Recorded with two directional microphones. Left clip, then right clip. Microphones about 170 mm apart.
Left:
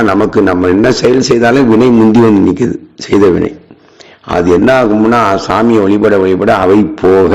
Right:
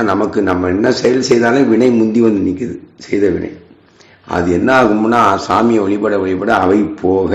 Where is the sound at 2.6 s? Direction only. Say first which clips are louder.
Left 9 dB; 70° left (ahead or behind).